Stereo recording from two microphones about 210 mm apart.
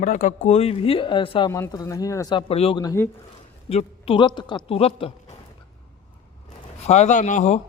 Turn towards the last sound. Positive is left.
turn(degrees=35)  # may be behind; listen again after turning